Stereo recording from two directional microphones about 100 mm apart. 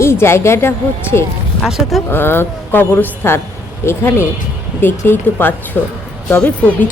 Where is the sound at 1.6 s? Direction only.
Centre (ahead or behind).